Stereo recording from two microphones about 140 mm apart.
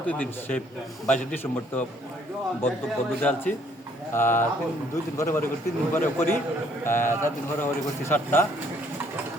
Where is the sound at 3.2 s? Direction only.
10° left (ahead or behind).